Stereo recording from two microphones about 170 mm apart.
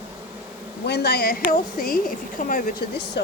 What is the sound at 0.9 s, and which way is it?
Speech, 75° left (ahead or behind).